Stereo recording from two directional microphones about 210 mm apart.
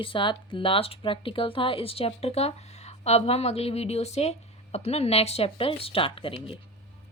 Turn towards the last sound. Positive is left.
turn(degrees=25)  # may be behind; listen again after turning